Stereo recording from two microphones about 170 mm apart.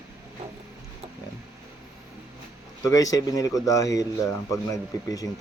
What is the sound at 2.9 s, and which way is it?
Speech, 20° left (ahead or behind).